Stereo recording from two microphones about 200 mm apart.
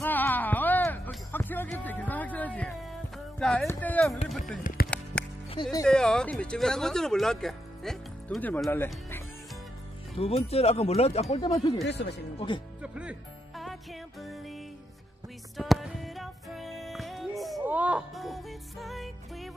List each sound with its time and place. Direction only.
0.0 s music: 10° left (ahead or behind)
4.7 s music: 40° left (ahead or behind)
5.1 s music: 5° left (ahead or behind)
5.5 s speech: 20° left (ahead or behind)
5.9 s speech: 5° left (ahead or behind)
10.1 s speech: 30° left (ahead or behind)
11.8 s speech: 60° left (ahead or behind)
12.4 s speech: 25° left (ahead or behind)
12.8 s music: 5° right (ahead or behind)
15.5 s music: centre (ahead or behind)